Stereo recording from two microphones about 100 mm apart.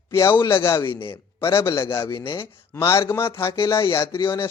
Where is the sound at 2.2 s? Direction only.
40° left (ahead or behind).